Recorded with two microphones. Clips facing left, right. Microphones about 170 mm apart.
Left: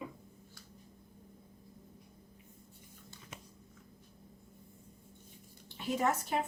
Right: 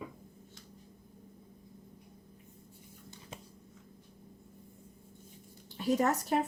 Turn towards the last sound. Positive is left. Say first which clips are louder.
# right 4 dB
turn(degrees=-40)  # may be behind; listen again after turning